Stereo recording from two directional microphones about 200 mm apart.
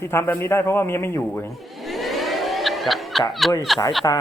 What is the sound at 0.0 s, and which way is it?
A man's voice, 10° left (ahead or behind).